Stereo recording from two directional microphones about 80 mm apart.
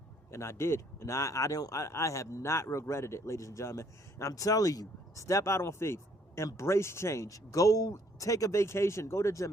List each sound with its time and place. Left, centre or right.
0.3 s speech: left